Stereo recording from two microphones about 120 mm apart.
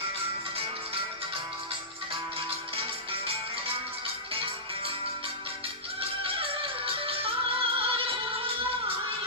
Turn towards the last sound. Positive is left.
turn(degrees=-50)  # may be behind; listen again after turning